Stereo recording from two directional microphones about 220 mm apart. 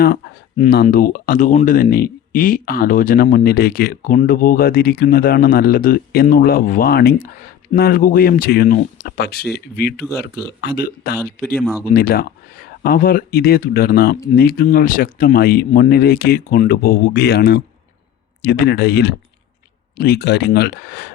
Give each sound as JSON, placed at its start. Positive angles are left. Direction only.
{"t": 0.0, "sound": "speech", "side_deg": 40}
{"t": 10.0, "sound": "speech", "side_deg": 10}
{"t": 10.6, "sound": "speech", "side_deg": 45}
{"t": 11.5, "sound": "speech", "side_deg": 0}
{"t": 11.9, "sound": "speech", "side_deg": 45}